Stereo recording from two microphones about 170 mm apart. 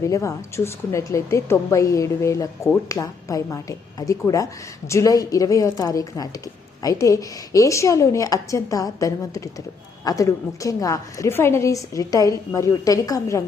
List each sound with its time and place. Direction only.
0.0 s a woman's voice: 20° left (ahead or behind)